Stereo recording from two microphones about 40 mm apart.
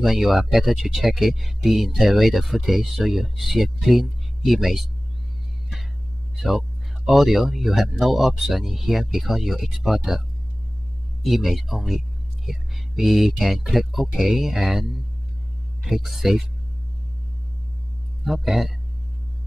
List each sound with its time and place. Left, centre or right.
0.0 s speech: centre
6.3 s speech: centre
11.2 s speech: centre
15.9 s speech: centre
18.2 s speech: centre